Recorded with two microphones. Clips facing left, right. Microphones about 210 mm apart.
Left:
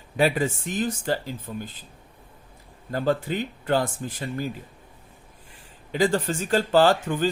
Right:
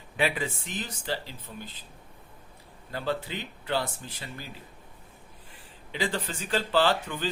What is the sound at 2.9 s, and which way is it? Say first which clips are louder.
Speech: left 7 dB; 45° left (ahead or behind).